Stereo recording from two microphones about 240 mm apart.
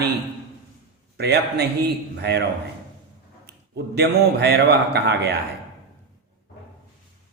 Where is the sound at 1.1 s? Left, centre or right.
Right.